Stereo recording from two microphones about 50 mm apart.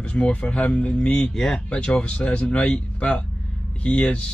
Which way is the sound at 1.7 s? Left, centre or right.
Left.